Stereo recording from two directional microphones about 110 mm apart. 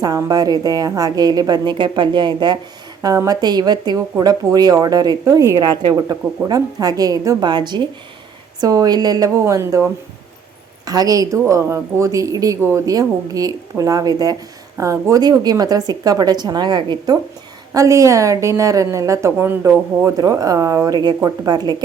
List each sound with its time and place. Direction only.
0.0 s a woman's voice: 35° right (ahead or behind)
17.7 s a woman's voice: 30° right (ahead or behind)
20.1 s a woman's voice: 30° right (ahead or behind)